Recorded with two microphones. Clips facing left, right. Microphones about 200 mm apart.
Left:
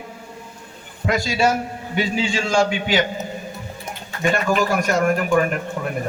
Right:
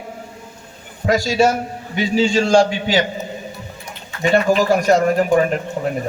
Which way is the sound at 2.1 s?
40° right (ahead or behind).